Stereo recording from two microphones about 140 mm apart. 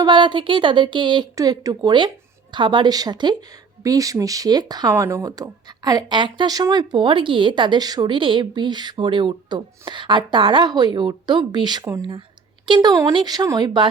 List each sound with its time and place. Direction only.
0.0 s a woman's voice: 35° right (ahead or behind)